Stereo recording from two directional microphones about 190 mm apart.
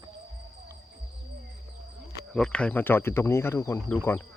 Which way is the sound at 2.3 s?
5° left (ahead or behind).